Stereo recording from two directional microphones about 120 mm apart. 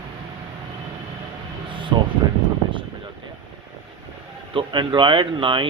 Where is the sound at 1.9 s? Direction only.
40° right (ahead or behind).